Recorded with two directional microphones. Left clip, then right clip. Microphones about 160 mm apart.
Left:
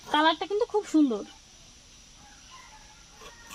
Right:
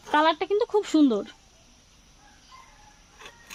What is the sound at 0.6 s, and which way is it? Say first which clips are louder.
Speech: right 2 dB; 55° right (ahead or behind).